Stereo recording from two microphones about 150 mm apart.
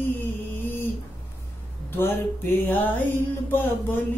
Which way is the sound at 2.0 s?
15° left (ahead or behind).